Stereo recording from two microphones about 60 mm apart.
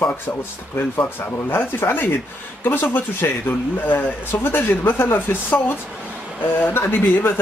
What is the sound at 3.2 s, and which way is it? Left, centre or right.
Speech, left.